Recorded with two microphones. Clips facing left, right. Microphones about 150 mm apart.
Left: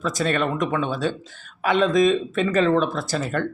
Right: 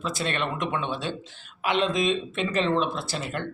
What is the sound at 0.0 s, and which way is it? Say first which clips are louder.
Speech: left 6 dB; 45° left (ahead or behind).